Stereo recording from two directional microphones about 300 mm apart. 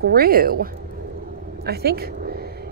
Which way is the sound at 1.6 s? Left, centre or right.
Right.